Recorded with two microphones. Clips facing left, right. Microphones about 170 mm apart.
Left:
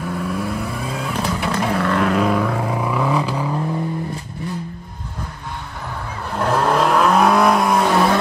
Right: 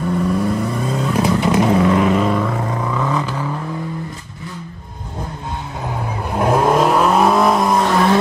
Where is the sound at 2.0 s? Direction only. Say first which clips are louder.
Right 2 dB; centre (ahead or behind); by 3.6 s 15° left (ahead or behind).